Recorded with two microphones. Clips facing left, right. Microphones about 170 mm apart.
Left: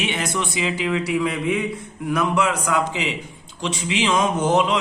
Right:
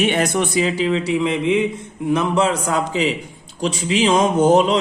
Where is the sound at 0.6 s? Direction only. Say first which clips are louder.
Right 4 dB; 30° right (ahead or behind).